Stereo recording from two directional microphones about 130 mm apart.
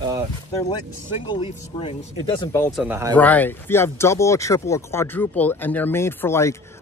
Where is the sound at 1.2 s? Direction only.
40° left (ahead or behind).